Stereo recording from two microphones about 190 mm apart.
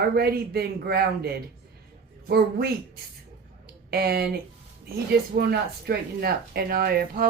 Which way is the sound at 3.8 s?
55° right (ahead or behind).